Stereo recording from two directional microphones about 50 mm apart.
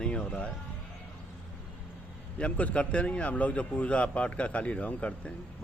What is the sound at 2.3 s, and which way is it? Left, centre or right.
A man's voice, left.